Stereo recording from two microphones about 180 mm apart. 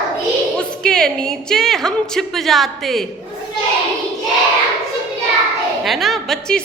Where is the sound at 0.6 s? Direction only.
5° left (ahead or behind).